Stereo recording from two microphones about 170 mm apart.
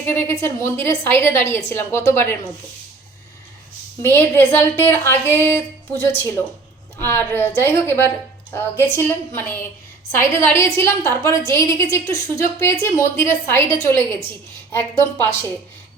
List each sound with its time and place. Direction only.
0.0 s a woman's voice: 10° left (ahead or behind)
4.0 s a woman's voice: 15° left (ahead or behind)